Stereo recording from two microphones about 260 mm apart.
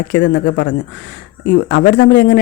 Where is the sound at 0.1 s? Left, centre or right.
Left.